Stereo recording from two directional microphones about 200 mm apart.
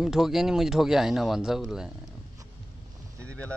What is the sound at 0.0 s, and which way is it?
Speech, centre (ahead or behind).